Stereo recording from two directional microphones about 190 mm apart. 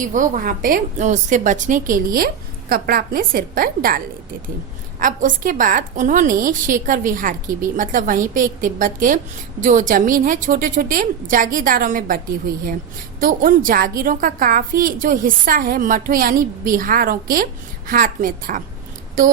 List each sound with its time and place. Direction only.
0.1 s a woman's voice: 45° right (ahead or behind)